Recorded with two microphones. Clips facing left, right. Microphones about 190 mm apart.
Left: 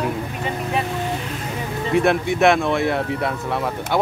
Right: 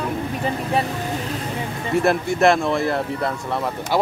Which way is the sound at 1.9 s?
Centre (ahead or behind).